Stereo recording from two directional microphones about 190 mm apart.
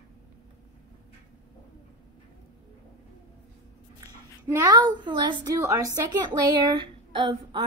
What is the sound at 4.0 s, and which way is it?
A woman's voice, 15° right (ahead or behind).